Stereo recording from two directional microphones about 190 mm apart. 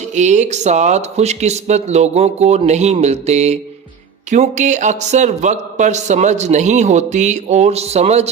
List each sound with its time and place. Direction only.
0.2 s speech: 40° right (ahead or behind)